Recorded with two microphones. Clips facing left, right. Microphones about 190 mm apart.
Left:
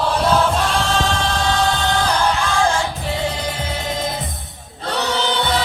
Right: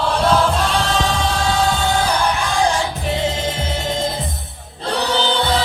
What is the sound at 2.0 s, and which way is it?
Music, 10° right (ahead or behind).